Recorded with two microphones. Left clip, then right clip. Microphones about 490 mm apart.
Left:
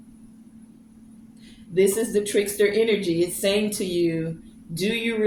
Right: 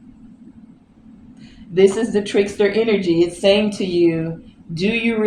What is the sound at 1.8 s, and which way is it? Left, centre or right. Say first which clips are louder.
Speech: right 5 dB; left.